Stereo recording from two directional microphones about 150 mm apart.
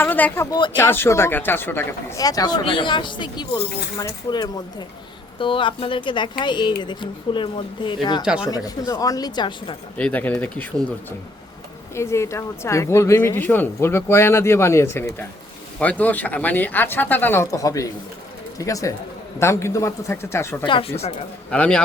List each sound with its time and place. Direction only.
0.0 s speech: 10° left (ahead or behind); by 9.7 s 30° left (ahead or behind)
10.0 s speech: 10° left (ahead or behind)
11.9 s speech: 20° left (ahead or behind)
20.7 s speech: 35° left (ahead or behind)
21.5 s speech: 5° left (ahead or behind)